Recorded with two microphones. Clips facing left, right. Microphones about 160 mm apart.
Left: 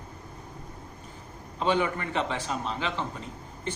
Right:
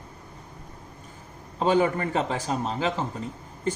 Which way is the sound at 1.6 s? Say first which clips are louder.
Right 4 dB; 40° right (ahead or behind).